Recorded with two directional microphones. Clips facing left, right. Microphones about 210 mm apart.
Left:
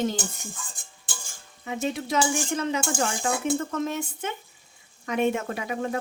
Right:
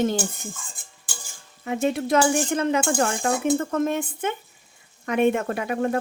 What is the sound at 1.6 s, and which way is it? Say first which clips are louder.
Speech: right 5 dB; 55° right (ahead or behind).